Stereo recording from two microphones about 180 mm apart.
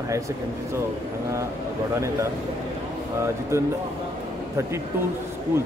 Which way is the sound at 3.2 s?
15° right (ahead or behind).